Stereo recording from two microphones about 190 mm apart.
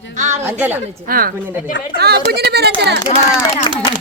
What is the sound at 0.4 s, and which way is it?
Speech, 10° right (ahead or behind).